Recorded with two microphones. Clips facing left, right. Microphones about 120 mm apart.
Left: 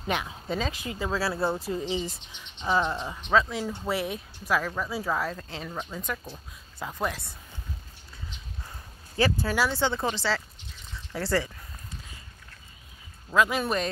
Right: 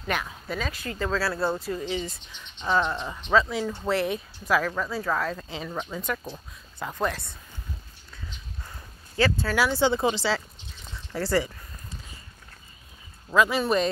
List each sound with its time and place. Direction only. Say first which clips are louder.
0.0 s speech: even; 20° left (ahead or behind)
0.7 s speech: right 2 dB; 15° left (ahead or behind)
9.1 s speech: right 1 dB; 15° left (ahead or behind)
9.6 s speech: right 5 dB; 5° right (ahead or behind)
13.3 s speech: right 2 dB; centre (ahead or behind)